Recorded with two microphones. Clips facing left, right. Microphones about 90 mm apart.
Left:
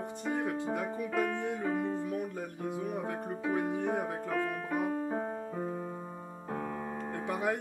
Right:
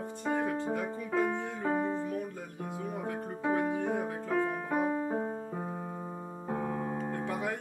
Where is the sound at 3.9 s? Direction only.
10° left (ahead or behind).